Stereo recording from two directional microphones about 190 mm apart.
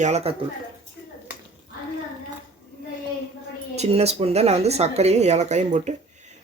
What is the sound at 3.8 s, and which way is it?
Speech, 35° right (ahead or behind).